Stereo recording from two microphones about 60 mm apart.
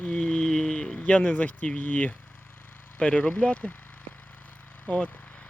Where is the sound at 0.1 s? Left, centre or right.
Centre.